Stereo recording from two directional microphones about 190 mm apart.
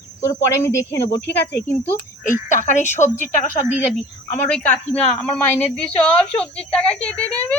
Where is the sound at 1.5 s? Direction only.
10° left (ahead or behind).